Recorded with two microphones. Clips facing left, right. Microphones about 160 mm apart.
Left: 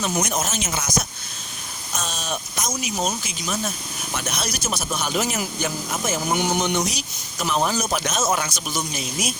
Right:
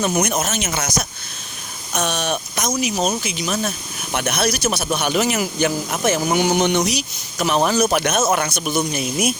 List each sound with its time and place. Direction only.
0.0 s speech: 65° right (ahead or behind)